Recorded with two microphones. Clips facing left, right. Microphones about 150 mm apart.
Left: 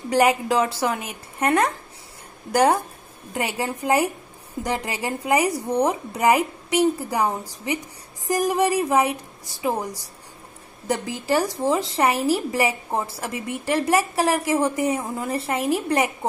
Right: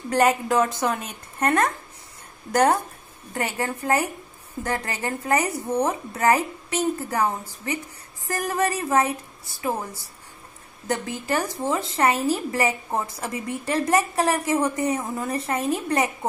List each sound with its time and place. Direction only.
0.1 s a woman's voice: 10° left (ahead or behind)
10.9 s a woman's voice: 10° left (ahead or behind)